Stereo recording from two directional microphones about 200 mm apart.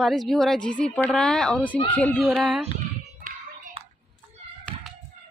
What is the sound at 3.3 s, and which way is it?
Hands, 40° right (ahead or behind).